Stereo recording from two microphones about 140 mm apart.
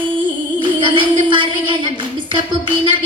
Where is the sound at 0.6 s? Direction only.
35° right (ahead or behind).